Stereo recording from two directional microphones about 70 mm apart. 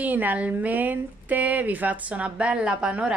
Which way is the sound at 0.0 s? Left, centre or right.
Right.